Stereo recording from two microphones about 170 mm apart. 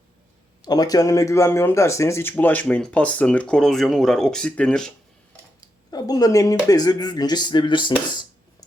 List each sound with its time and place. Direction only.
0.6 s speech: 20° left (ahead or behind); by 4.9 s 5° left (ahead or behind)
5.5 s speech: 20° left (ahead or behind)